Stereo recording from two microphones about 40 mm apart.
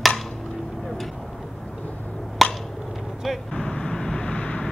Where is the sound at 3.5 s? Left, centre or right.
Left.